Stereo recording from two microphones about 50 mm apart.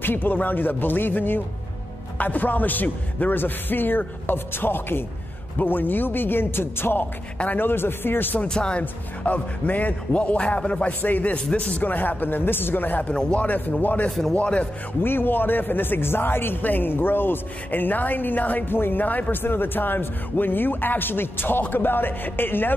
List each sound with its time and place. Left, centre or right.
0.0 s a man's voice: left
7.3 s speech: left
8.5 s a man's voice: centre
10.9 s a man's voice: left
11.3 s a man's voice: left
13.1 s a man's voice: left
13.5 s a man's voice: left
15.0 s speech: left